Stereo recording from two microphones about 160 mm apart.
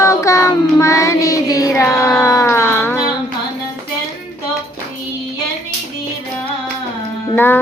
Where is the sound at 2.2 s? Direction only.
20° left (ahead or behind).